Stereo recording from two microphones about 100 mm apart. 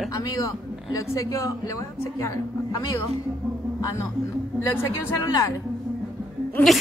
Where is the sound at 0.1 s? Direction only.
35° left (ahead or behind).